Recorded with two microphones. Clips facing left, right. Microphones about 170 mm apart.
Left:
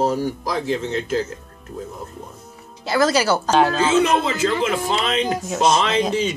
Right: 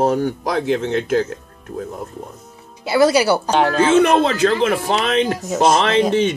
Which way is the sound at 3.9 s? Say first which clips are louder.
Right 4 dB; 65° right (ahead or behind).